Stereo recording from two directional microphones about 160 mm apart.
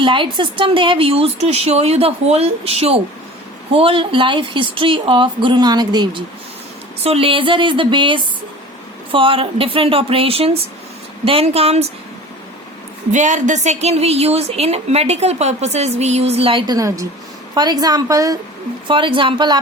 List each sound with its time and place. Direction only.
0.0 s a woman's voice: 30° right (ahead or behind)
7.0 s a woman's voice: 35° right (ahead or behind)
13.1 s a woman's voice: 50° right (ahead or behind); by 18.3 s 20° right (ahead or behind)
18.9 s a woman's voice: 30° right (ahead or behind)